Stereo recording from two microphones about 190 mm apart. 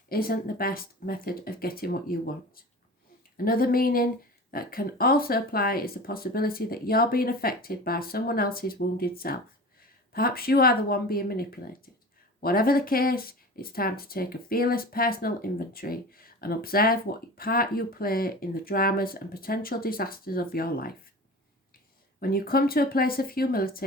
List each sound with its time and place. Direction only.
0.1 s speech: 50° left (ahead or behind)
22.2 s speech: 50° left (ahead or behind)